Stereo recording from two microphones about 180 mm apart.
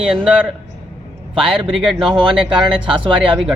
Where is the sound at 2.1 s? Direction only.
25° right (ahead or behind).